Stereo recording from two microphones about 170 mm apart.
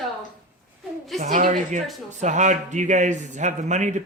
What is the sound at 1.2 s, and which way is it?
A man's voice, 45° right (ahead or behind).